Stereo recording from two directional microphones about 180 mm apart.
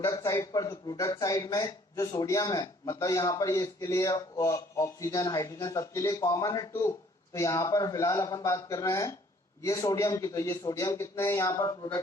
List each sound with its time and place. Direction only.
0.0 s a man's voice: 15° left (ahead or behind)